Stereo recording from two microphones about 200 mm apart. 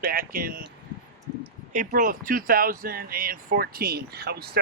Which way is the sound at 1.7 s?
45° right (ahead or behind).